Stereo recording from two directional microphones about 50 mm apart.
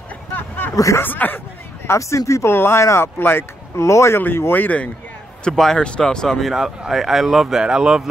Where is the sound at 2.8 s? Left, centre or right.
Left.